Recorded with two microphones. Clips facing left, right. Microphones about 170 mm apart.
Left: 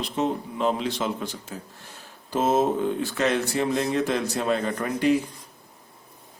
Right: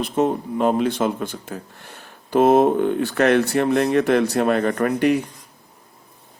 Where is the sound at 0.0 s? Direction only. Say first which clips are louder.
Right 6 dB; 50° right (ahead or behind).